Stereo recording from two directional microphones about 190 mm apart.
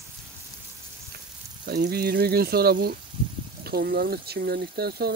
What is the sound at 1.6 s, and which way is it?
Speech, 55° right (ahead or behind).